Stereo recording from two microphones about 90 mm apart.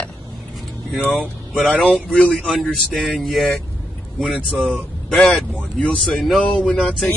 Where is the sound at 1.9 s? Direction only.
10° left (ahead or behind).